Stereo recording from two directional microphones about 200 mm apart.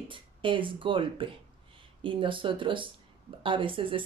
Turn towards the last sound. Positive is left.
turn(degrees=-25)  # may be behind; listen again after turning